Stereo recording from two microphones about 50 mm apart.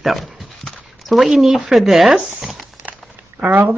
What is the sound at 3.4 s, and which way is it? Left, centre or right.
Speech, right.